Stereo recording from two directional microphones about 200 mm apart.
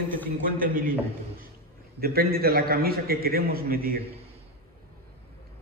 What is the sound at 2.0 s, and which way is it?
A man's voice, 50° right (ahead or behind).